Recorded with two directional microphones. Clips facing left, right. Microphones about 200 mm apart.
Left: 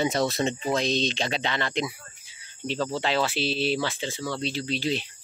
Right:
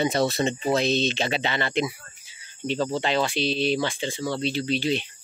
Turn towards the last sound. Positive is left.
turn(degrees=0)  # may be behind; listen again after turning